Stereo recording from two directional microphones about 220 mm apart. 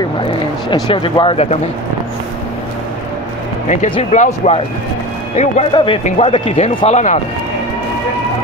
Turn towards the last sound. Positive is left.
turn(degrees=30)  # may be behind; listen again after turning